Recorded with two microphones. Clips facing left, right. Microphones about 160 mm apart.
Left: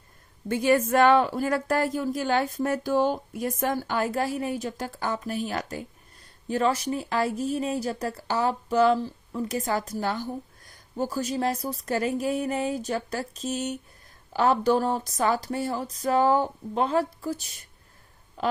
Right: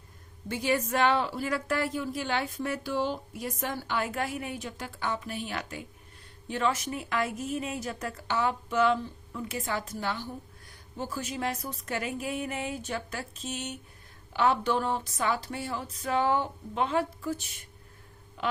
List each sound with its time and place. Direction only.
0.4 s a woman's voice: 50° left (ahead or behind)